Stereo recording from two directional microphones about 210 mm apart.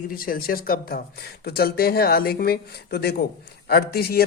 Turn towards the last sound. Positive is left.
turn(degrees=50)  # may be behind; listen again after turning